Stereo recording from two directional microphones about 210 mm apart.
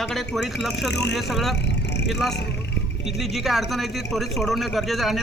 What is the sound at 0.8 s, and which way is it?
Speech, 55° left (ahead or behind).